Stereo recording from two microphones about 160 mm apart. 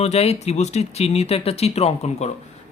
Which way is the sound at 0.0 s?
40° left (ahead or behind).